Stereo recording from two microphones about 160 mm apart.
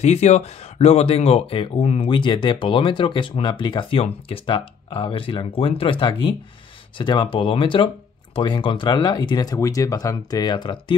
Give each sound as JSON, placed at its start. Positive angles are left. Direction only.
{"t": 0.0, "sound": "speech", "side_deg": 45}